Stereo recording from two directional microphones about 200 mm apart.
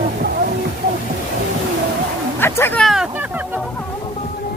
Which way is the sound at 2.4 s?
10° left (ahead or behind).